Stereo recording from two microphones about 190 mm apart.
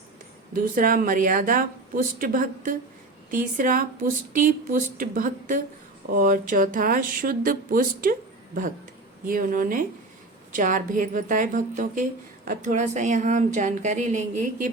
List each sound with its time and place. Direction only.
0.5 s speech: 45° right (ahead or behind)
9.2 s a woman's voice: 45° right (ahead or behind)